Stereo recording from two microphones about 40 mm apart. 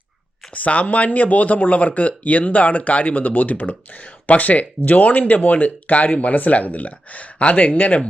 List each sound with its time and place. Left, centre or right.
0.5 s speech: left
7.8 s speech: left